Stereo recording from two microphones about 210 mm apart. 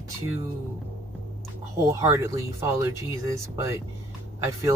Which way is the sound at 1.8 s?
15° right (ahead or behind).